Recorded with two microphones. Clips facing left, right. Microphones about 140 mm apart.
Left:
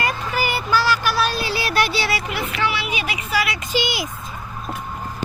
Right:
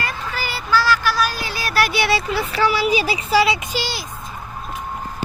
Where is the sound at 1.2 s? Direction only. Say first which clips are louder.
Left 1 dB; 30° left (ahead or behind).